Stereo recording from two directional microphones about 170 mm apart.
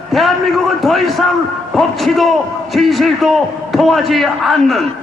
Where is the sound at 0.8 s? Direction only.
Centre (ahead or behind).